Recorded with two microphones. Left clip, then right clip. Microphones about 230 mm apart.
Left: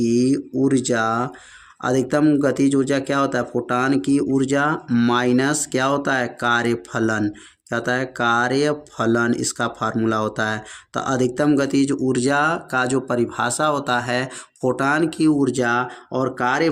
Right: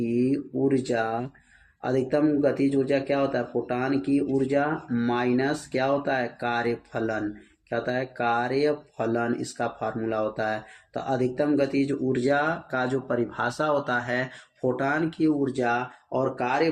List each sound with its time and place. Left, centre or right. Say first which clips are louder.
0.0 s speech: left 6 dB; left